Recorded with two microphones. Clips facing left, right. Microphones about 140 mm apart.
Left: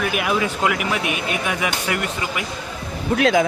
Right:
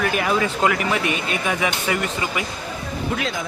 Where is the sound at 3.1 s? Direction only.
65° left (ahead or behind).